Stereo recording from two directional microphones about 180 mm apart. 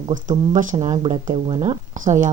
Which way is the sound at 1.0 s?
25° right (ahead or behind).